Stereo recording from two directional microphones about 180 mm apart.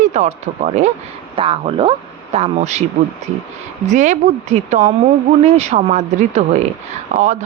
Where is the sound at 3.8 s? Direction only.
40° right (ahead or behind).